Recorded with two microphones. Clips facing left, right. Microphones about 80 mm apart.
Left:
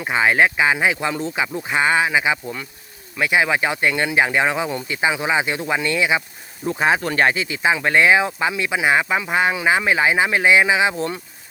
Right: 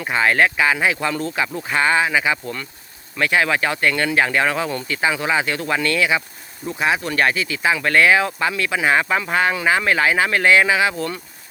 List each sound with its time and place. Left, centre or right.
0.1 s speech: centre
6.7 s speech: left